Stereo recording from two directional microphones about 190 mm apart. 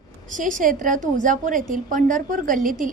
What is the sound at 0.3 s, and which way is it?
A woman's voice, 45° right (ahead or behind).